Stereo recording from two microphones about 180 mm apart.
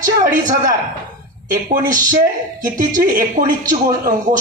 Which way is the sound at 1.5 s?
50° right (ahead or behind).